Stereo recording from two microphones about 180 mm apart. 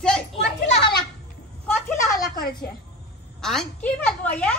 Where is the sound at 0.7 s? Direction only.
65° left (ahead or behind).